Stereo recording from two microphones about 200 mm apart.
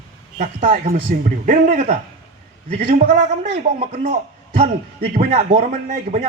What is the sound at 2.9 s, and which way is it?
Speech, 45° right (ahead or behind).